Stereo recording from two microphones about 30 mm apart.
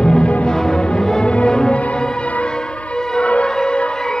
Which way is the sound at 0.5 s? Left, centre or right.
Left.